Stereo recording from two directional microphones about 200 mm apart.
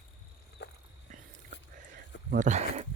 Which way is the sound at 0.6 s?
55° left (ahead or behind).